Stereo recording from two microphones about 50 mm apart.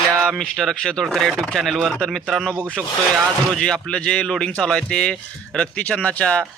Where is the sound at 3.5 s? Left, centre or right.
Centre.